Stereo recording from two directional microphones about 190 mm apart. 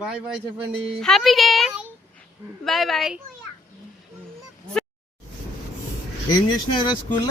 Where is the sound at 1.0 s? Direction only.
Centre (ahead or behind).